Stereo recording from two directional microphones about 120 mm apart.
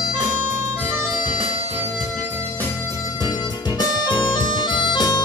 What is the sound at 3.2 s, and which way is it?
Music, 35° left (ahead or behind).